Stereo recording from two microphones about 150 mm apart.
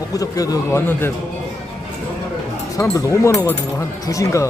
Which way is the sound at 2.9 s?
20° left (ahead or behind).